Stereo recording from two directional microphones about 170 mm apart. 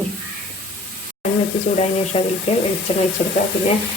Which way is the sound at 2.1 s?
35° left (ahead or behind).